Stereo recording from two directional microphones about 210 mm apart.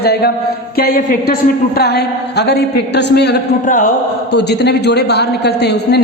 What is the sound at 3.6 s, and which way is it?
Speech, 40° left (ahead or behind).